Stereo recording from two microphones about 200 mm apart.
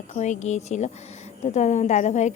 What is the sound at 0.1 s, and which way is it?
A woman's voice, 35° left (ahead or behind).